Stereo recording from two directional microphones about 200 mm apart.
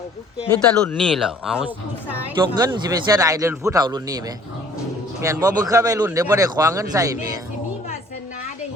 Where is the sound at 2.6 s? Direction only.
20° right (ahead or behind).